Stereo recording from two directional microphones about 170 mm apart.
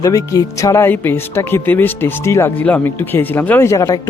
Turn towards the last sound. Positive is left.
turn(degrees=15)  # may be behind; listen again after turning